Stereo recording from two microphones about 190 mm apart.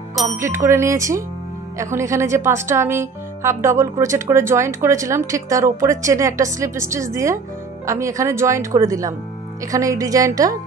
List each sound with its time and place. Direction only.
0.4 s speech: 15° right (ahead or behind)